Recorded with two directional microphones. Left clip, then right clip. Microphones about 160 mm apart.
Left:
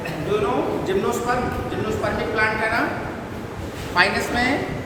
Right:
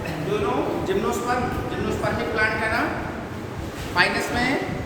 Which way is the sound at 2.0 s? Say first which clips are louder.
Left 1 dB; 15° left (ahead or behind).